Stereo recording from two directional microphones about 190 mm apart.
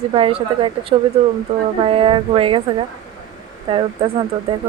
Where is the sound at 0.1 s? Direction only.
30° right (ahead or behind).